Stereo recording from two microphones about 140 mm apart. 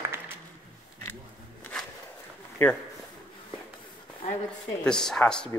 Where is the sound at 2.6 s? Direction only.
10° left (ahead or behind).